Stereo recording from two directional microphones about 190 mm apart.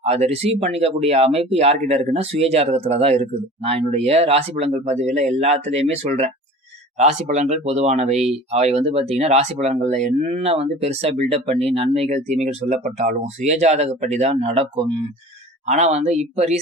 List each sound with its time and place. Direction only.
0.0 s speech: 35° right (ahead or behind)